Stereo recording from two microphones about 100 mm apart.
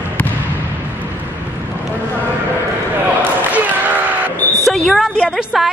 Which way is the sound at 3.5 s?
15° right (ahead or behind).